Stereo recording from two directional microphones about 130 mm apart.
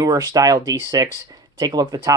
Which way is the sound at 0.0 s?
30° right (ahead or behind).